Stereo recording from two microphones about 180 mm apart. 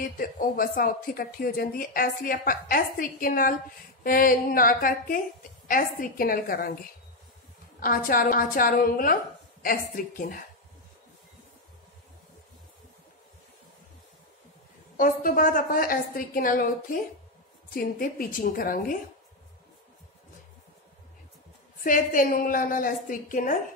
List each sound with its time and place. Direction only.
0.0 s speech: 50° left (ahead or behind)
7.8 s speech: 55° left (ahead or behind)
15.0 s speech: 50° left (ahead or behind)
17.7 s speech: 55° left (ahead or behind)
21.8 s speech: 50° left (ahead or behind)